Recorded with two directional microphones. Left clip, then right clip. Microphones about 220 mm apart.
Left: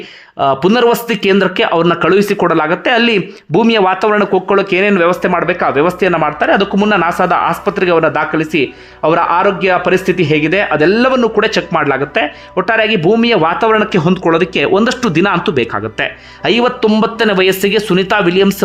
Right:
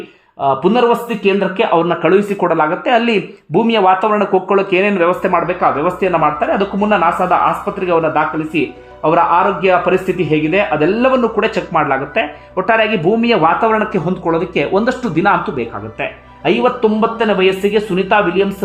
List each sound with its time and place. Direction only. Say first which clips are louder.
0.3 s a man's voice: left 2 dB; 20° left (ahead or behind)